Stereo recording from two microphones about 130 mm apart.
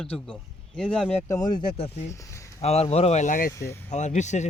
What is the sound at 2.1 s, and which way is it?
Speech, 25° left (ahead or behind).